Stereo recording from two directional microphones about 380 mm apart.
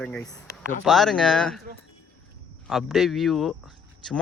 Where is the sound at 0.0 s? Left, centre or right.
Centre.